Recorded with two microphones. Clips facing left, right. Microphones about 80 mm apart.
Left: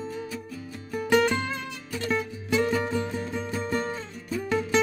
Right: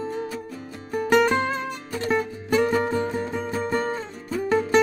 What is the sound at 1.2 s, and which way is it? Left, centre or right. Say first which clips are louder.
Music: right 5 dB; right.